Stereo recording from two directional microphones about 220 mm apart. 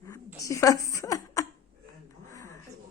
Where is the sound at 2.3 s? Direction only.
15° left (ahead or behind).